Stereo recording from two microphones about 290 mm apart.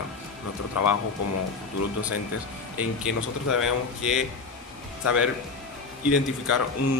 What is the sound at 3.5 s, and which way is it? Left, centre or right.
Speech, left.